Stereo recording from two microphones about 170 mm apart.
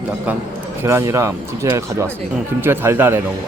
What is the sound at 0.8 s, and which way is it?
Speech, 15° right (ahead or behind).